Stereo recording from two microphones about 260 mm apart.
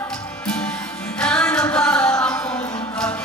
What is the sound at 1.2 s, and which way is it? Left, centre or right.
Music, centre.